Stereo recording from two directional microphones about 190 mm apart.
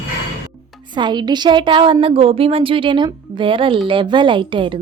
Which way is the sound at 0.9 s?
25° right (ahead or behind).